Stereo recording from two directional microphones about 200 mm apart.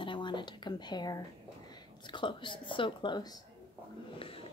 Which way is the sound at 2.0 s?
25° left (ahead or behind).